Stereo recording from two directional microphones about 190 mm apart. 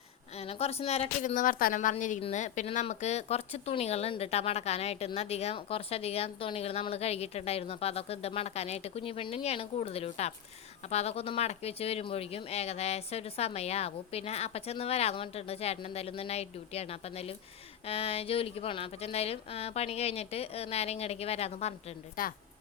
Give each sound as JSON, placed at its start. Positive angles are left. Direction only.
{"t": 0.3, "sound": "a woman's voice", "side_deg": 30}